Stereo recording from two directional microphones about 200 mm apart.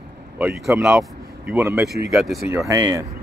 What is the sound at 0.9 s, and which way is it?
Speech, 10° right (ahead or behind).